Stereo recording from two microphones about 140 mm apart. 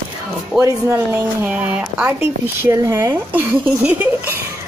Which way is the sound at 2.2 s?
20° right (ahead or behind).